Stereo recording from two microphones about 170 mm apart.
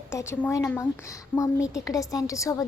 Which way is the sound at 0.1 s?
15° left (ahead or behind).